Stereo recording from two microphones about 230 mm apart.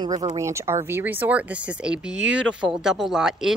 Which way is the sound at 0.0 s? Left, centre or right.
Centre.